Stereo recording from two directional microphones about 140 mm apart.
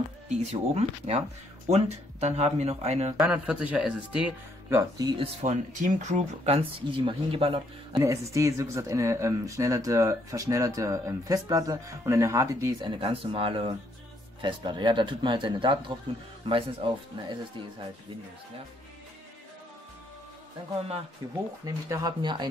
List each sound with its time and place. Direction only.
0.3 s speech: 50° right (ahead or behind)
3.2 s speech: 5° right (ahead or behind)
4.6 s speech: 20° right (ahead or behind)
5.2 s speech: 55° right (ahead or behind)
6.9 s speech: 40° right (ahead or behind)
8.0 s speech: 20° right (ahead or behind)
12.8 s speech: 40° right (ahead or behind)
21.2 s speech: 25° right (ahead or behind)